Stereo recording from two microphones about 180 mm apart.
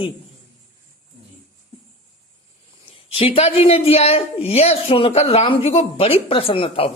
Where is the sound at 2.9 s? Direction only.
30° left (ahead or behind).